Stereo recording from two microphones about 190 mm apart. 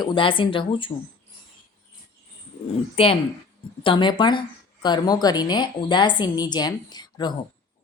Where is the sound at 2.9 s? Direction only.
30° left (ahead or behind).